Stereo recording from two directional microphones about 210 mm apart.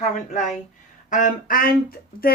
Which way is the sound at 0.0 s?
35° left (ahead or behind).